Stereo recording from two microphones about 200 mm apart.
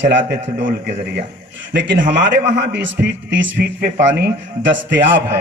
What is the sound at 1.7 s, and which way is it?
A man's voice, 60° right (ahead or behind).